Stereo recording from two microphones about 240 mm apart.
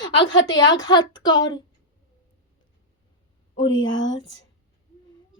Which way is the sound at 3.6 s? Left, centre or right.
Left.